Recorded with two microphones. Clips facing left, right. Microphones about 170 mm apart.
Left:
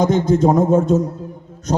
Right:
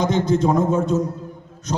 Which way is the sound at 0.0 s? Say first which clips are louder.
Left 4 dB; 45° left (ahead or behind).